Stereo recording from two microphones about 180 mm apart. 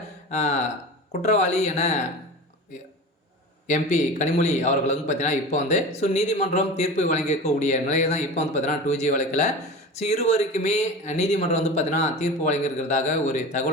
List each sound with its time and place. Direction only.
0.3 s a man's voice: 40° left (ahead or behind)
3.7 s a man's voice: 40° left (ahead or behind)